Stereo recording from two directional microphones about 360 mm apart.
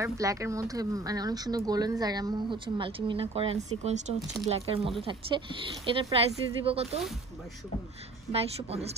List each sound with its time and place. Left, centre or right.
0.0 s speech: centre
5.9 s speech: centre
8.3 s speech: centre